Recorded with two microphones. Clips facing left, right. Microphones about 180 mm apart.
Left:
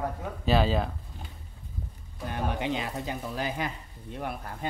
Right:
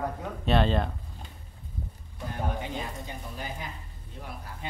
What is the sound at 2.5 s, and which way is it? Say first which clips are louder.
Speech: left 4 dB; 85° left.